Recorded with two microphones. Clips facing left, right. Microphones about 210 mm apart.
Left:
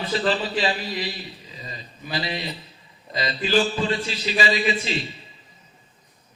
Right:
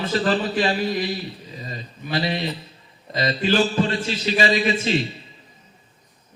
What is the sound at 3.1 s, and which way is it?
Speech, 45° right (ahead or behind).